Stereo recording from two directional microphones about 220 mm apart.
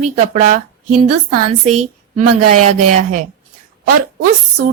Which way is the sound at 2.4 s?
90° right.